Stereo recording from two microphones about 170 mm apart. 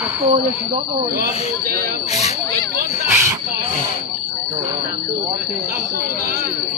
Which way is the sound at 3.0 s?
15° right (ahead or behind).